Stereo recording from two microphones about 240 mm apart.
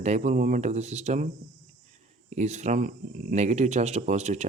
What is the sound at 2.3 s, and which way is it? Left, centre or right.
Speech, right.